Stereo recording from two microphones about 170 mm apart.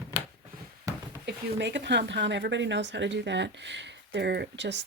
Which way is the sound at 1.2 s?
90° right.